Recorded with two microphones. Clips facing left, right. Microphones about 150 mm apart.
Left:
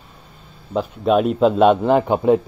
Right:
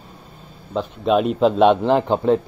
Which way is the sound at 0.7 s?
Centre (ahead or behind).